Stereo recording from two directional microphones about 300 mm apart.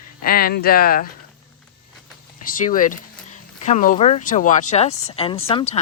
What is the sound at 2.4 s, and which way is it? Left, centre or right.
A woman's voice, left.